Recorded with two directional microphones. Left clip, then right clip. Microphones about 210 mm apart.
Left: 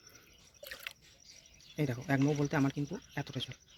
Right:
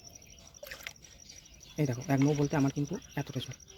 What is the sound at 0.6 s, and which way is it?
Drip, 25° left (ahead or behind).